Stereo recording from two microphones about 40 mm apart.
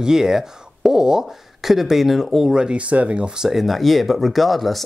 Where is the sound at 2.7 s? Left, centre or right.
Right.